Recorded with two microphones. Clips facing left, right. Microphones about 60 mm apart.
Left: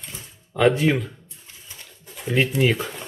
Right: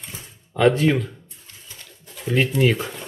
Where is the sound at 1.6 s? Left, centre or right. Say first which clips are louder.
Even; centre.